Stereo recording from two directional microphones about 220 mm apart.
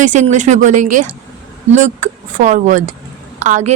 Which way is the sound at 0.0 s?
35° right (ahead or behind).